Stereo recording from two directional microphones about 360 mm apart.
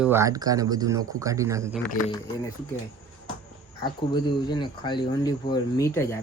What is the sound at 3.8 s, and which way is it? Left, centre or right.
Speech, centre.